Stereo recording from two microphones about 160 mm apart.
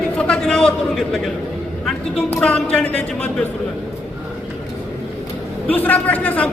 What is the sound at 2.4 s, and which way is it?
A man's voice, 5° left (ahead or behind).